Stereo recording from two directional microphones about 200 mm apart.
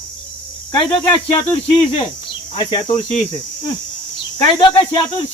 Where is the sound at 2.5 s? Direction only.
25° left (ahead or behind).